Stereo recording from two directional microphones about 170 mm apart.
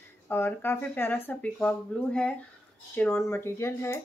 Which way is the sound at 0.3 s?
10° left (ahead or behind).